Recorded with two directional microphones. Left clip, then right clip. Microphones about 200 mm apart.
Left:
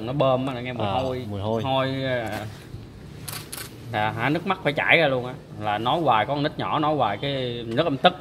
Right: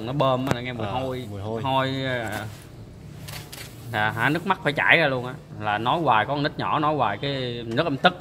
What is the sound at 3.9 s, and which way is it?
Speech, centre (ahead or behind).